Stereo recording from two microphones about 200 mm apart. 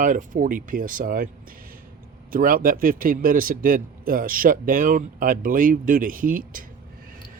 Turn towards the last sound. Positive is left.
turn(degrees=-45)  # may be behind; listen again after turning